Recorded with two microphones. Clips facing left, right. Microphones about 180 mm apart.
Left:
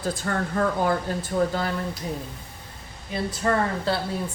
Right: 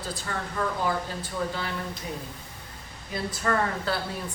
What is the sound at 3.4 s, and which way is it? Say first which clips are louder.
Speech: left 3 dB; 25° left (ahead or behind).